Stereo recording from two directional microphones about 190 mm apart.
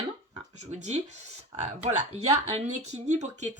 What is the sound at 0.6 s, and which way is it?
Speech, 35° right (ahead or behind).